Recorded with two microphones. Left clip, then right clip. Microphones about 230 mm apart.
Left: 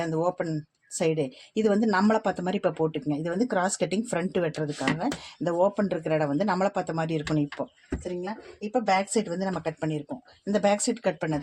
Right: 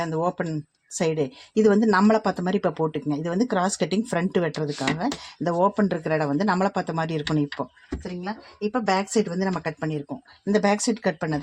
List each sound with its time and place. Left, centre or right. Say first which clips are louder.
0.0 s speech: right 2 dB; right
8.7 s speech: right 1 dB; right